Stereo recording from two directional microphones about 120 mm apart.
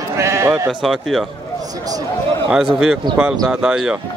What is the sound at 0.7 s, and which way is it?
Speech, centre (ahead or behind).